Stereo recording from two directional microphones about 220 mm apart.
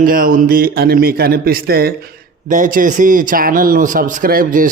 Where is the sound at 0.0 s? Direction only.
40° right (ahead or behind).